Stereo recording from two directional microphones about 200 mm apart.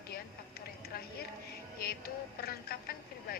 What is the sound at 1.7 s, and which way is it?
Speech, 50° left (ahead or behind).